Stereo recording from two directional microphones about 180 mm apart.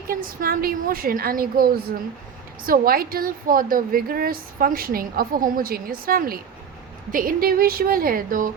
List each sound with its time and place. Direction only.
0.1 s a woman's voice: 50° right (ahead or behind)